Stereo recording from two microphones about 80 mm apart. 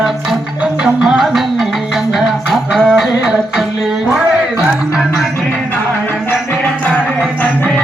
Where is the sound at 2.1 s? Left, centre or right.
Centre.